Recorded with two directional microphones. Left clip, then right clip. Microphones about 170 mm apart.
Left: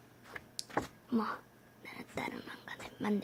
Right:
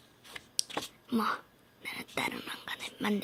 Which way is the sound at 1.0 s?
Centre (ahead or behind).